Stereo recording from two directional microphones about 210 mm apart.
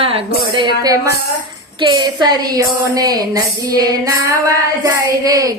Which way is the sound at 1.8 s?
20° right (ahead or behind).